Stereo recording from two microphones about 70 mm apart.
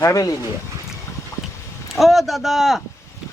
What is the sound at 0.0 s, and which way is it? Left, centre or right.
Speech, left.